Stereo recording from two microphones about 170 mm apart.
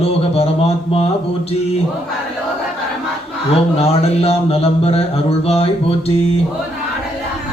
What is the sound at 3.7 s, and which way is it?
Mantra, 35° left (ahead or behind).